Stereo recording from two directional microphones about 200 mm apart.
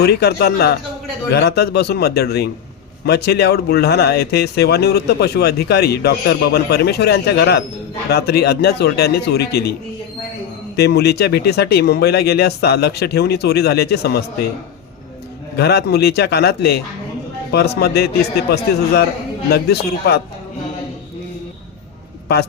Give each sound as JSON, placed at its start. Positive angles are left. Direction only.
{"t": 0.0, "sound": "speech", "side_deg": 55}
{"t": 10.8, "sound": "speech", "side_deg": 55}
{"t": 15.5, "sound": "a man's voice", "side_deg": 55}